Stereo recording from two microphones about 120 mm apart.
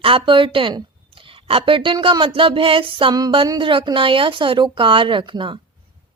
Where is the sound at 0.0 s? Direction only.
45° right (ahead or behind).